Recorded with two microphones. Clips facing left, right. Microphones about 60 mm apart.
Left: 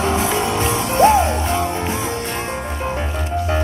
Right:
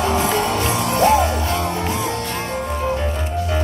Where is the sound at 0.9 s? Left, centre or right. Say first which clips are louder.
Left 3 dB; left.